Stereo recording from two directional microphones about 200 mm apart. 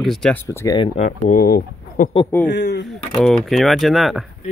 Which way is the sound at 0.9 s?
40° left (ahead or behind).